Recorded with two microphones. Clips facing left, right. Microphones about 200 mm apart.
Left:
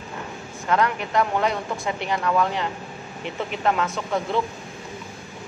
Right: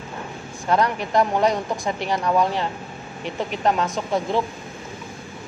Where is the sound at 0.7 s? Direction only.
35° right (ahead or behind).